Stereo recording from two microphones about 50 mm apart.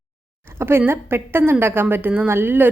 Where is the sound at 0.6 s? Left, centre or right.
Right.